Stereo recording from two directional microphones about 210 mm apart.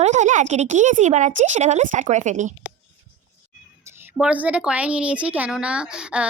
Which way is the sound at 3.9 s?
10° right (ahead or behind).